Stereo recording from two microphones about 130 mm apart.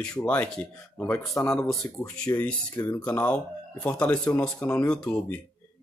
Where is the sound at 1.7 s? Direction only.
5° left (ahead or behind).